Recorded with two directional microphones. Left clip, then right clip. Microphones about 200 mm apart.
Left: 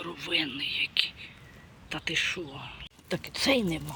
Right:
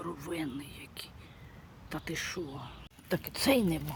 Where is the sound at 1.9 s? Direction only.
5° right (ahead or behind).